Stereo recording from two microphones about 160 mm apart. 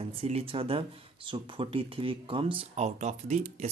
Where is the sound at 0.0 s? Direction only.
40° right (ahead or behind).